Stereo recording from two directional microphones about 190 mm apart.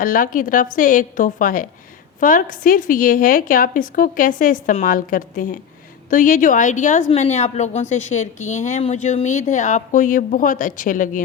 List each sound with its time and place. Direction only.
0.0 s a woman's voice: 45° left (ahead or behind)